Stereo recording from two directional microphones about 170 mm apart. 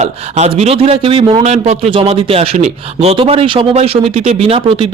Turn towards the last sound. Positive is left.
turn(degrees=-35)  # may be behind; listen again after turning